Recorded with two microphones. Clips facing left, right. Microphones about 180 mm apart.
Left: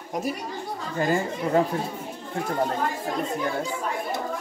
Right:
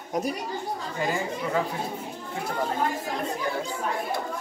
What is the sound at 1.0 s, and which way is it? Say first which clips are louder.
Speech: left 4 dB; 45° left (ahead or behind).